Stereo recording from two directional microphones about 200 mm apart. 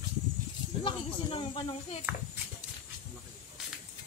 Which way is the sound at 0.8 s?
25° left (ahead or behind).